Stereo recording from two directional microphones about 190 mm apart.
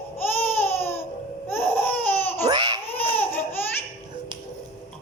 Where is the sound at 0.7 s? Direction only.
10° left (ahead or behind).